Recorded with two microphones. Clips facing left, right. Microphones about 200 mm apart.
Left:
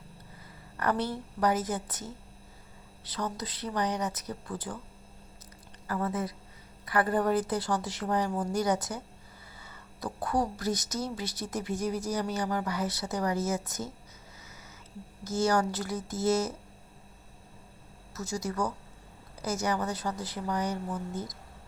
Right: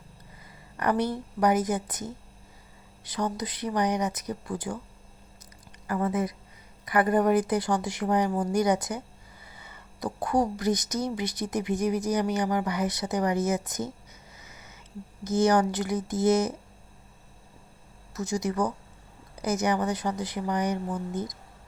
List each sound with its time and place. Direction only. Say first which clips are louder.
0.8 s speech: right 4 dB; 15° right (ahead or behind)
5.9 s speech: right 4 dB; 15° right (ahead or behind)
15.2 s speech: right 5 dB; 20° right (ahead or behind)
18.1 s speech: right 5 dB; 15° right (ahead or behind)